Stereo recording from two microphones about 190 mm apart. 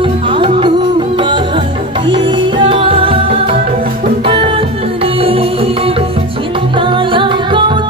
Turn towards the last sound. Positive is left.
turn(degrees=-25)  # may be behind; listen again after turning